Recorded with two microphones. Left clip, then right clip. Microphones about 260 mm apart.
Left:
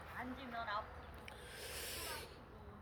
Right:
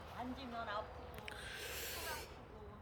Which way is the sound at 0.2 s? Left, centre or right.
Right.